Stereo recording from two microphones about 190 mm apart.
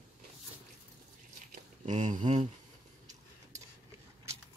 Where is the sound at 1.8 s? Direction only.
40° right (ahead or behind).